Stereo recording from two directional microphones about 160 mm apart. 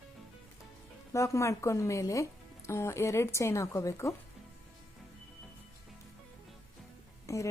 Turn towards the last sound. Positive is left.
turn(degrees=20)  # may be behind; listen again after turning